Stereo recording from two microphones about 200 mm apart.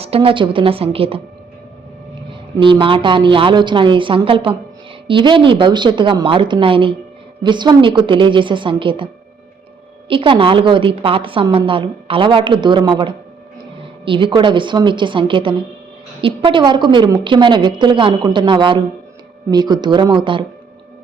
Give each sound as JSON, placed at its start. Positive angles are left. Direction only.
{"t": 0.0, "sound": "a woman's voice", "side_deg": -30}
{"t": 2.6, "sound": "a woman's voice", "side_deg": -25}
{"t": 10.1, "sound": "a woman's voice", "side_deg": -25}